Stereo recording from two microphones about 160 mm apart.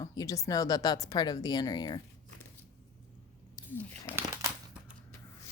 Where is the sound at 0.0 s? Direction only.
20° left (ahead or behind).